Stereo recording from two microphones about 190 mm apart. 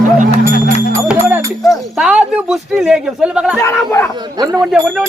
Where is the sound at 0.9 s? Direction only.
10° right (ahead or behind).